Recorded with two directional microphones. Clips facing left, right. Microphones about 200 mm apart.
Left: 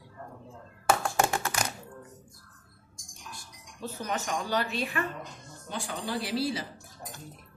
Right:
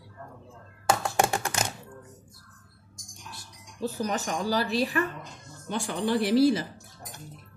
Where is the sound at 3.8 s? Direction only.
35° right (ahead or behind).